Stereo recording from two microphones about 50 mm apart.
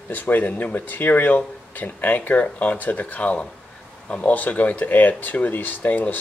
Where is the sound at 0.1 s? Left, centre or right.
Left.